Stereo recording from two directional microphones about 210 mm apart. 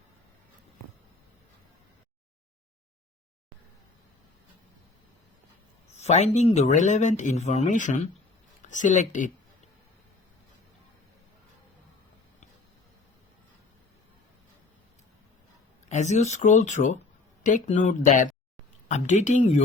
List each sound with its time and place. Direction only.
5.9 s speech: 30° left (ahead or behind)
15.9 s speech: 35° left (ahead or behind)